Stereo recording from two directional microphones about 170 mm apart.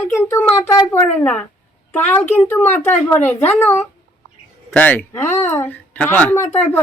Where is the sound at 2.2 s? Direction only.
40° left (ahead or behind).